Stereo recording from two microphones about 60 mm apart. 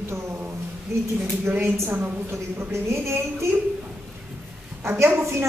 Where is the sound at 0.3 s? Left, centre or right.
Right.